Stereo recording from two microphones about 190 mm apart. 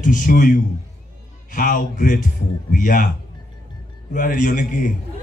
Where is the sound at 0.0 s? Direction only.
45° left (ahead or behind).